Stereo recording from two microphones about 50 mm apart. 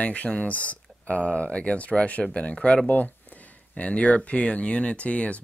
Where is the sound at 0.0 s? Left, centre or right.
Left.